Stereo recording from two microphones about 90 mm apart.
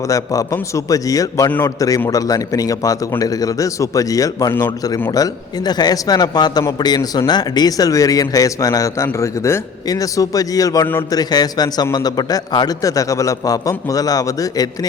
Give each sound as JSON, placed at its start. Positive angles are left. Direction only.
{"t": 0.1, "sound": "a man's voice", "side_deg": 40}